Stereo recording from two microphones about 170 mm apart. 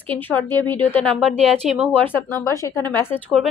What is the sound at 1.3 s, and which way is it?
Speech, 40° right (ahead or behind).